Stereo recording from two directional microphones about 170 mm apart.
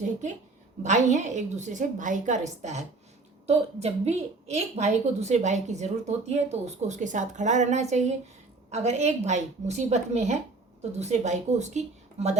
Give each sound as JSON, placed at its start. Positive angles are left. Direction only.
{"t": 0.8, "sound": "a woman's voice", "side_deg": -45}